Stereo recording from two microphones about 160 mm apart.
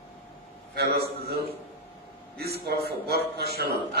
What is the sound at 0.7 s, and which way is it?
Speech, 85° right.